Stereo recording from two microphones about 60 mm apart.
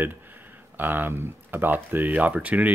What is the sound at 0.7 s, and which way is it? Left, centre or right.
Speech, right.